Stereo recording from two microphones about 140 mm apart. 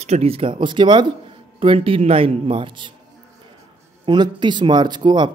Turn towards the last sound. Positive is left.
turn(degrees=-30)  # may be behind; listen again after turning